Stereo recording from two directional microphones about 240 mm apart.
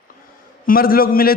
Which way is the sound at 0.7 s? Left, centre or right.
Left.